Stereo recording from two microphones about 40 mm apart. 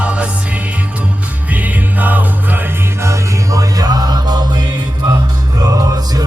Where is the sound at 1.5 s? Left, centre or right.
Right.